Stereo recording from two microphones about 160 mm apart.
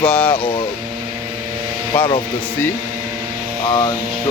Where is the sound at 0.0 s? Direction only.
5° left (ahead or behind).